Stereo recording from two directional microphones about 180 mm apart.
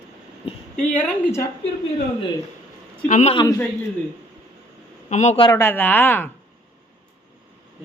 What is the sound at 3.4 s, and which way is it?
Speech, 20° left (ahead or behind).